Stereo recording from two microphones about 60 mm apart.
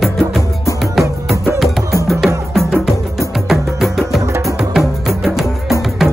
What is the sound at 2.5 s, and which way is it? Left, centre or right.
Music, centre.